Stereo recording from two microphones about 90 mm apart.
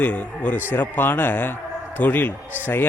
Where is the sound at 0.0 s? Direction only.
20° left (ahead or behind).